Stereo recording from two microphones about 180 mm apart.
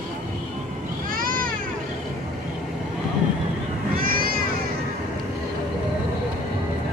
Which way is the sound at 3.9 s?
55° right (ahead or behind).